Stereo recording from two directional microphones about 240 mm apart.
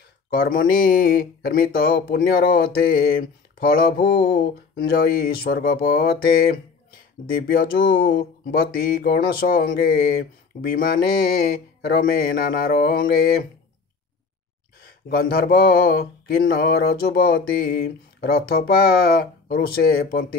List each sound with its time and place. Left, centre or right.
0.3 s speech: left
14.8 s speech: left